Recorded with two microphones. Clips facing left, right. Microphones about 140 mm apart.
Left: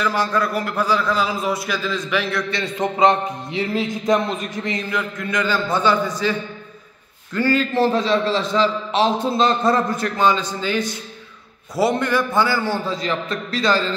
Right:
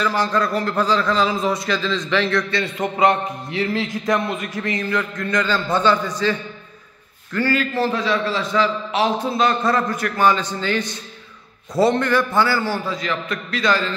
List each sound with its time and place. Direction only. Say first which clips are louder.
0.0 s a man's voice: even; 10° left (ahead or behind)
7.3 s a man's voice: left 2 dB; 20° left (ahead or behind)